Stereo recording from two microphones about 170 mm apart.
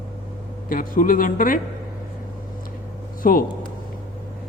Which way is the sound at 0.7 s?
55° left (ahead or behind).